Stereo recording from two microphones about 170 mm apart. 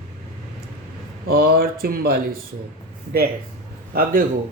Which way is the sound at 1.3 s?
60° right (ahead or behind).